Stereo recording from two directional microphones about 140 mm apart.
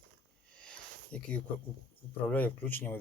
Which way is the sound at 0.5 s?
5° left (ahead or behind).